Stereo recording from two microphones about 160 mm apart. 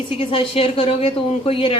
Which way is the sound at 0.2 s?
35° left (ahead or behind).